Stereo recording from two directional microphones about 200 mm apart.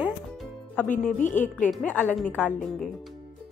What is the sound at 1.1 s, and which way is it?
Speech, 40° left (ahead or behind).